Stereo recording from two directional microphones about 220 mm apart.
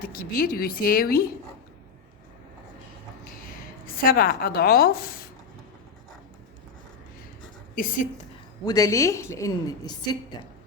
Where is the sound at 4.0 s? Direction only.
40° left (ahead or behind).